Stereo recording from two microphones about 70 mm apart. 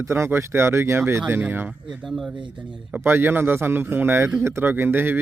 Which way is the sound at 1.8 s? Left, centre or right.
Centre.